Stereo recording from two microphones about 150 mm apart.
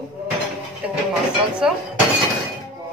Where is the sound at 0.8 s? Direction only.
10° right (ahead or behind).